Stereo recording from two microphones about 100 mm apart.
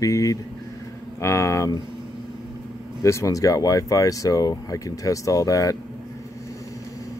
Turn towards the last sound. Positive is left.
turn(degrees=35)  # may be behind; listen again after turning